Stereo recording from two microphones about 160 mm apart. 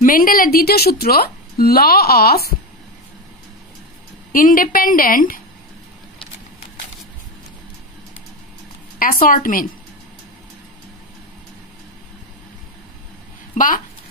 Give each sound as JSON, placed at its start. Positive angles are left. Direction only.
{"t": 0.0, "sound": "a woman's voice", "side_deg": 60}
{"t": 4.3, "sound": "a woman's voice", "side_deg": 60}
{"t": 9.0, "sound": "a woman's voice", "side_deg": 60}